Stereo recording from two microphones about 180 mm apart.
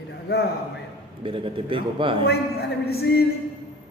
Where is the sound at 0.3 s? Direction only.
60° left (ahead or behind).